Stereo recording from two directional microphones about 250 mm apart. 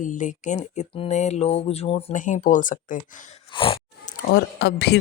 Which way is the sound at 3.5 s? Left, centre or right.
Left.